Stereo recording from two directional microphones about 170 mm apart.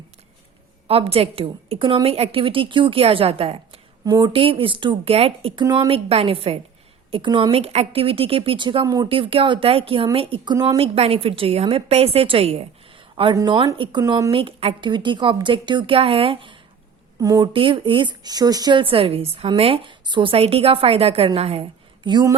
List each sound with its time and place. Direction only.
0.9 s speech: 35° right (ahead or behind)
4.0 s speech: 25° right (ahead or behind)
5.6 s a woman's voice: 20° right (ahead or behind)
5.9 s speech: 35° right (ahead or behind)
10.9 s a woman's voice: 35° right (ahead or behind); by 14.3 s 20° right (ahead or behind)
14.3 s a woman's voice: 35° right (ahead or behind)
17.2 s speech: 20° right (ahead or behind)